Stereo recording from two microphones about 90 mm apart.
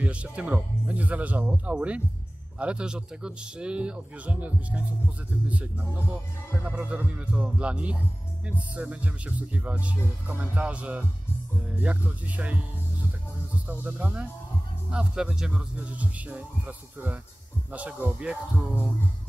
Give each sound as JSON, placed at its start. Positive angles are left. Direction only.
{"t": 0.0, "sound": "speech", "side_deg": -15}
{"t": 13.7, "sound": "speech", "side_deg": -15}